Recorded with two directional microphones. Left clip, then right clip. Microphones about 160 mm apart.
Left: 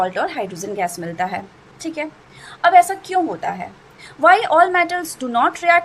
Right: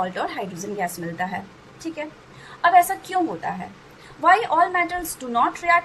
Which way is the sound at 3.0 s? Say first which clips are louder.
Left 4 dB; 30° left (ahead or behind).